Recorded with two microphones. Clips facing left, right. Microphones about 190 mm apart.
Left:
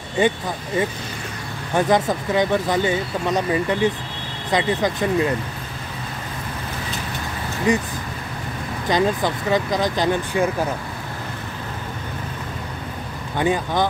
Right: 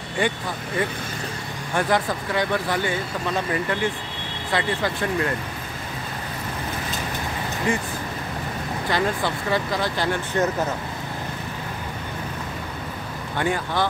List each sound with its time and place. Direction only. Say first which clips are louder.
0.2 s speech: left 5 dB; 20° left (ahead or behind)
1.8 s speech: left 4 dB; 20° left (ahead or behind)
7.7 s speech: left 5 dB; 20° left (ahead or behind)
8.9 s speech: left 5 dB; 15° left (ahead or behind)
13.4 s speech: left 4 dB; 15° left (ahead or behind)